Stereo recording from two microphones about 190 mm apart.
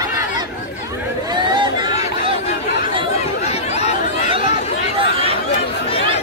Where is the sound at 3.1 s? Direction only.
35° left (ahead or behind).